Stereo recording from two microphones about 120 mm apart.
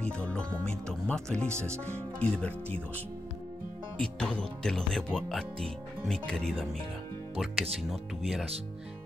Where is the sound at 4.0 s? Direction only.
10° left (ahead or behind).